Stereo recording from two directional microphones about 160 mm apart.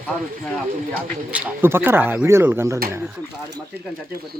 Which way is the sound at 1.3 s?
15° right (ahead or behind).